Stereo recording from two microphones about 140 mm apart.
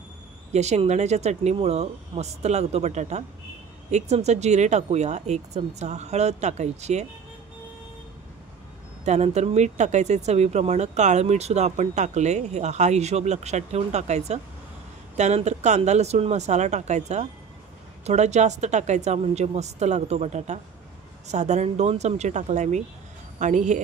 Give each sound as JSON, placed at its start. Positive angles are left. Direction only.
{"t": 0.5, "sound": "speech", "side_deg": -55}
{"t": 9.0, "sound": "speech", "side_deg": -55}